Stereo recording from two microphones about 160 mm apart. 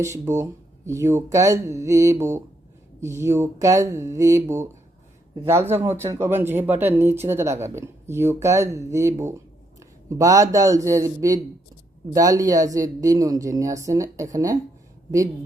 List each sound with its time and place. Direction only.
0.0 s speech: 20° right (ahead or behind)
5.7 s speech: 15° right (ahead or behind)